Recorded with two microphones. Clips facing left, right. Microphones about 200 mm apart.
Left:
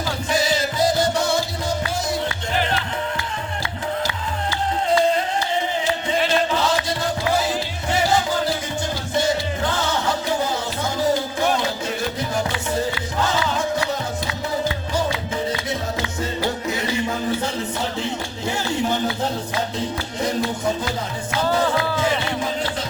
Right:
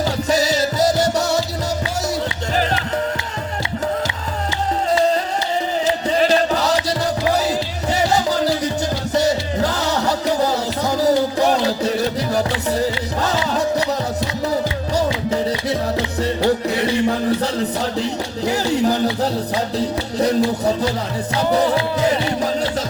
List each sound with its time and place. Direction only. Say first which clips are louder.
0.3 s music: right 2 dB; 40° right (ahead or behind)
6.1 s music: right 4 dB; 40° right (ahead or behind)
7.9 s music: right 2 dB; 40° right (ahead or behind)
12.7 s music: right 1 dB; 35° right (ahead or behind)
14.9 s music: right 6 dB; 35° right (ahead or behind)
16.6 s music: right 6 dB; 35° right (ahead or behind)
18.0 s a sound: right 4 dB; 35° right (ahead or behind)
20.1 s speech: right 7 dB; 35° right (ahead or behind)
22.0 s music: right 4 dB; 40° right (ahead or behind)